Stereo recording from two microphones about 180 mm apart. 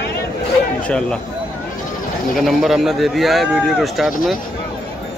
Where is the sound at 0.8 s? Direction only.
5° left (ahead or behind).